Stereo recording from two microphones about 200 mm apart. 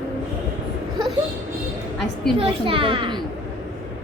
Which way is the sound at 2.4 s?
25° right (ahead or behind).